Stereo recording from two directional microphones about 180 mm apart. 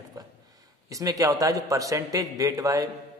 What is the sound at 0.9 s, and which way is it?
A man's voice, 20° right (ahead or behind).